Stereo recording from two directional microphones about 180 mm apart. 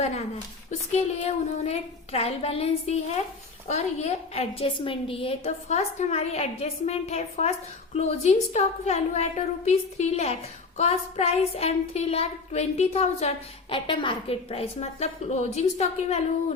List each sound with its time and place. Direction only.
0.7 s speech: 40° left (ahead or behind)